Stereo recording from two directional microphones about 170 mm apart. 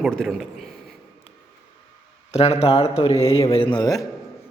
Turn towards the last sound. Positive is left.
turn(degrees=20)  # may be behind; listen again after turning